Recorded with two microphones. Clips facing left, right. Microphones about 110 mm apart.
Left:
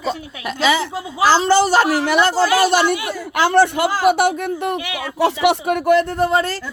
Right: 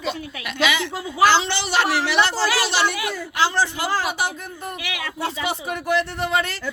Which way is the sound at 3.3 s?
55° left (ahead or behind).